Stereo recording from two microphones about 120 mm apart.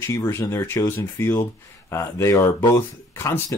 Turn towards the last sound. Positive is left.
turn(degrees=20)  # may be behind; listen again after turning